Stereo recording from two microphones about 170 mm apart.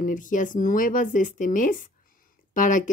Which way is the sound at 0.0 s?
50° left (ahead or behind).